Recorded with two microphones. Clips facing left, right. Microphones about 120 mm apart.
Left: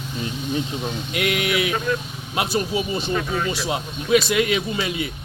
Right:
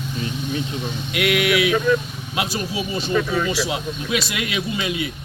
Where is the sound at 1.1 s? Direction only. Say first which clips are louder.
Right 4 dB; 35° left (ahead or behind).